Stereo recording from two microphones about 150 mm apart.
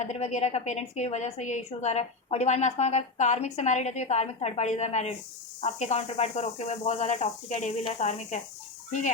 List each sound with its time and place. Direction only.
0.0 s a woman's voice: 50° left (ahead or behind)